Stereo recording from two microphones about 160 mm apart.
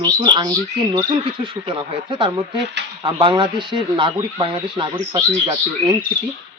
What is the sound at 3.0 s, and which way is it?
Speech, 30° right (ahead or behind).